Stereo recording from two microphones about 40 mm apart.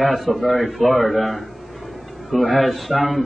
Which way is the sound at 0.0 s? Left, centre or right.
Centre.